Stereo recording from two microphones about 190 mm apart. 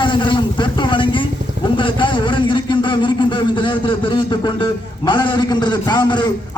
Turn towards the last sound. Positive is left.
turn(degrees=25)  # may be behind; listen again after turning